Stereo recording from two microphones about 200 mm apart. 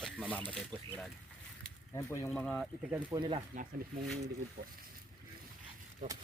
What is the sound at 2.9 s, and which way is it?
Speech, 20° right (ahead or behind).